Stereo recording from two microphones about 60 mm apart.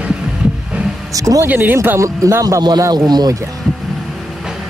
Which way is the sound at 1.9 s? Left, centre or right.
Right.